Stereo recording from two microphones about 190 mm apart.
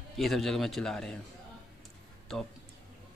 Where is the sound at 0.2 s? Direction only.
Centre (ahead or behind).